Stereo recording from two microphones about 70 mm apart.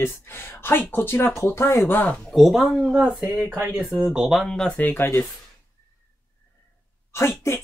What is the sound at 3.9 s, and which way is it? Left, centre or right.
Speech, centre.